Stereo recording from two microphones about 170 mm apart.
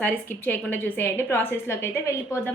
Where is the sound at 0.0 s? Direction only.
10° left (ahead or behind).